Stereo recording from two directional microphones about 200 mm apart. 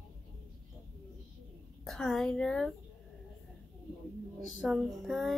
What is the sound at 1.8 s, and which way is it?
Speech, centre (ahead or behind).